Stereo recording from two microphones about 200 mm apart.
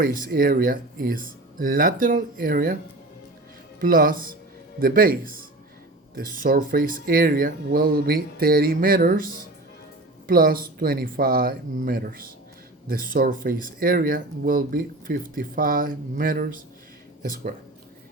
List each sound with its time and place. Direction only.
0.0 s speech: 45° right (ahead or behind)
3.8 s speech: 45° right (ahead or behind)